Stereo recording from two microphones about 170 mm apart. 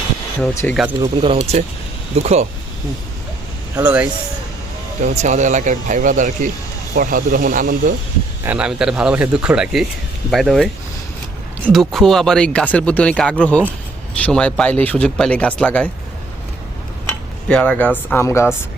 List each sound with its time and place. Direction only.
0.6 s speech: 5° left (ahead or behind)
1.0 s speech: 35° right (ahead or behind)
3.8 s speech: 10° right (ahead or behind)
5.0 s speech: 45° right (ahead or behind)
8.4 s speech: 5° right (ahead or behind)
17.1 s dishes: 5° left (ahead or behind)